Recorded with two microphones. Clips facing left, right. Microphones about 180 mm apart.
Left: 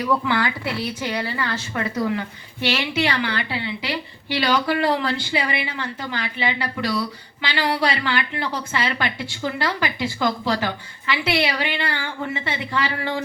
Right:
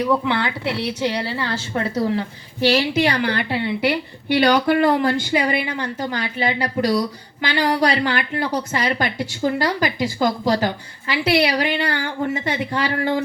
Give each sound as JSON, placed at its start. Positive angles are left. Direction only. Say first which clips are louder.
{"t": 0.1, "sound": "speech", "louder": "right 2 dB", "side_deg": -25}